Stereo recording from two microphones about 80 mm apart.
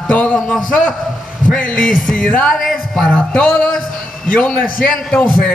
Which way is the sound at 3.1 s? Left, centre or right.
Centre.